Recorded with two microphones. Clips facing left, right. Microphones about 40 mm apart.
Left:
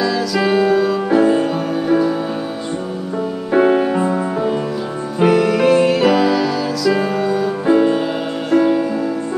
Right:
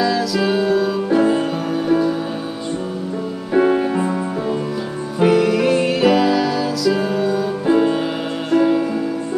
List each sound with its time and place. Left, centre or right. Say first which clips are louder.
0.0 s music: left 1 dB; centre
3.5 s music: left 2 dB; centre
5.2 s music: left 1 dB; centre